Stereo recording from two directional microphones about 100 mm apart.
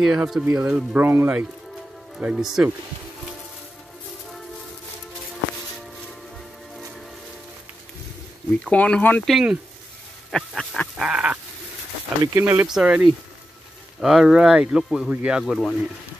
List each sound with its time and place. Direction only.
0.0 s speech: 5° right (ahead or behind); by 1.5 s 20° right (ahead or behind)
2.1 s speech: 5° right (ahead or behind)
8.6 s speech: 10° left (ahead or behind)
9.3 s speech: 10° right (ahead or behind)
11.0 s speech: 10° right (ahead or behind)
12.4 s speech: 20° right (ahead or behind)
12.6 s speech: 5° right (ahead or behind)
13.9 s speech: 5° right (ahead or behind)